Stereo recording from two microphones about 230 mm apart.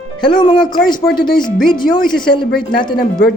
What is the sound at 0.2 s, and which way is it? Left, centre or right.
Speech, centre.